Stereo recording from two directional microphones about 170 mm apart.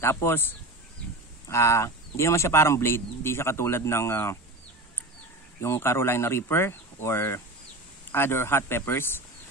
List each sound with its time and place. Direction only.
0.0 s speech: 15° left (ahead or behind)
5.6 s speech: 15° left (ahead or behind)